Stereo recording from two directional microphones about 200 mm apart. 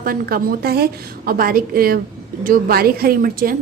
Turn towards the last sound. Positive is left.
turn(degrees=-45)  # may be behind; listen again after turning